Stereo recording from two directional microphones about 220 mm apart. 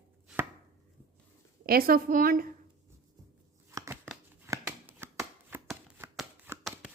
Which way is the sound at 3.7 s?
15° right (ahead or behind).